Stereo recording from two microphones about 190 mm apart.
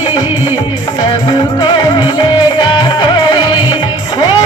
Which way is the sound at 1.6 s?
25° left (ahead or behind).